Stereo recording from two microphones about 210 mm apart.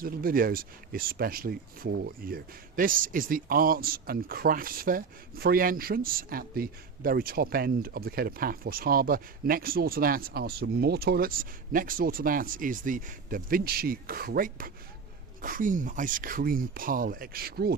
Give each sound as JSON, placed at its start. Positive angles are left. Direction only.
{"t": 0.0, "sound": "speech", "side_deg": -45}